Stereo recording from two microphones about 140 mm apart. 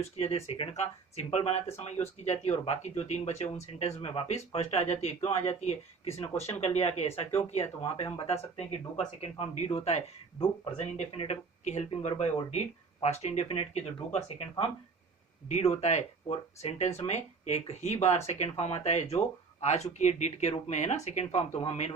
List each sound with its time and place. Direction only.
0.2 s speech: 45° left (ahead or behind)
15.4 s speech: 50° left (ahead or behind)